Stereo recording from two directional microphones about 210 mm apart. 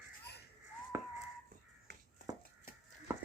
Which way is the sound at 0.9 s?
10° right (ahead or behind).